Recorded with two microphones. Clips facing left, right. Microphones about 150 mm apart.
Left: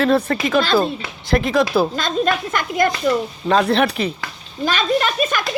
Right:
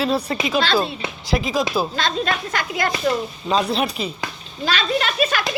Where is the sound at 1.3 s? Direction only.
60° left (ahead or behind).